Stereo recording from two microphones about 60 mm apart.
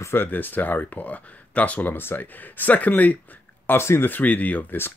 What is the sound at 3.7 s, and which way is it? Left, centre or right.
Speech, left.